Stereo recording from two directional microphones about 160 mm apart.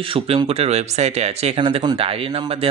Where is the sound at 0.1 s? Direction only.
35° right (ahead or behind).